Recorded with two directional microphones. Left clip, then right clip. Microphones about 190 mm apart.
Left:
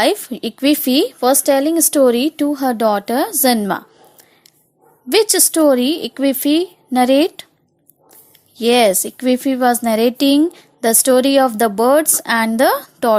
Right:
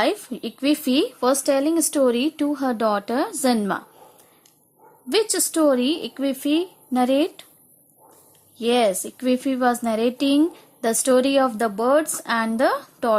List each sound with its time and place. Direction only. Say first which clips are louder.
0.0 s speech: left 6 dB; 20° left (ahead or behind)
5.0 s a woman's voice: left 7 dB; 20° left (ahead or behind)
8.5 s a woman's voice: left 7 dB; 20° left (ahead or behind)